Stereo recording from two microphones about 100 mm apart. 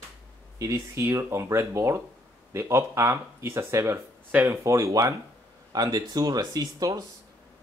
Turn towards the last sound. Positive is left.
turn(degrees=-40)  # may be behind; listen again after turning